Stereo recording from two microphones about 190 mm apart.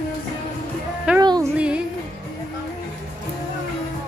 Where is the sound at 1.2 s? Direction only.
20° right (ahead or behind).